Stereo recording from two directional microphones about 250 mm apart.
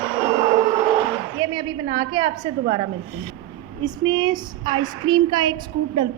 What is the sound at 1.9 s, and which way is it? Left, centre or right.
Speech, centre.